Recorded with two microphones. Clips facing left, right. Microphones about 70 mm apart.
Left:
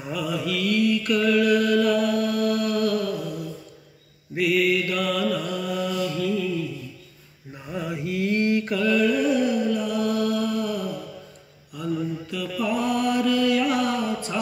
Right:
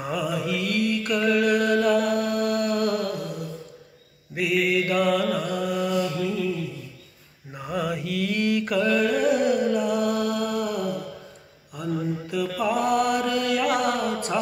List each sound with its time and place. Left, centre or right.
0.7 s mantra: right
4.6 s mantra: right
5.9 s music: right
7.5 s mantra: right
8.8 s music: right
11.9 s mantra: right